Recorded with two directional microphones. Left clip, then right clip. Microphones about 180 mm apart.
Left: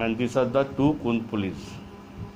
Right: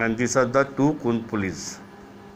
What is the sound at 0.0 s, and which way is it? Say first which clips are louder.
Speech: right 3 dB; 55° right (ahead or behind).